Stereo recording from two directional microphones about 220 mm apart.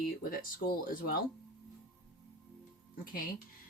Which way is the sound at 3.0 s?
40° left (ahead or behind).